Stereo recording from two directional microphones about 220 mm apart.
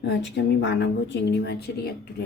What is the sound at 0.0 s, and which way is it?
Speech, 55° left (ahead or behind).